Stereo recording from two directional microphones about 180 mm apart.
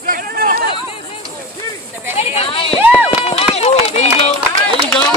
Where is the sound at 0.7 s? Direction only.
30° left (ahead or behind).